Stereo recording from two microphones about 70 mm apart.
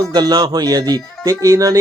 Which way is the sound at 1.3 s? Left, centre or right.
Right.